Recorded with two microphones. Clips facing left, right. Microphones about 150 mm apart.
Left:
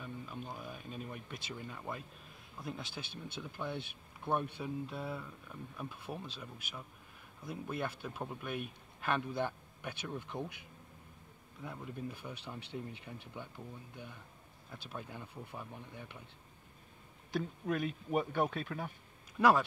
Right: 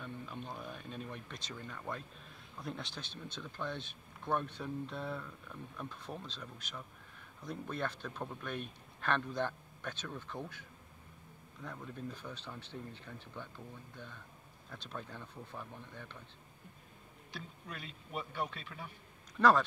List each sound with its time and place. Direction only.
0.0 s speech: 5° left (ahead or behind)
17.3 s speech: 50° left (ahead or behind)
19.3 s speech: 10° left (ahead or behind)